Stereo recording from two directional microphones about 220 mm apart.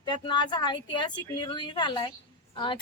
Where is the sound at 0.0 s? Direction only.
20° left (ahead or behind).